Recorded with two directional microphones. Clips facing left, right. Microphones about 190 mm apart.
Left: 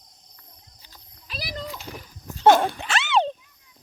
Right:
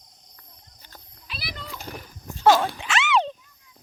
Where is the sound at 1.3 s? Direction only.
40° left (ahead or behind).